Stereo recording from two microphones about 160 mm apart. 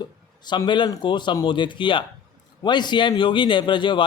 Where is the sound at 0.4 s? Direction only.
30° left (ahead or behind).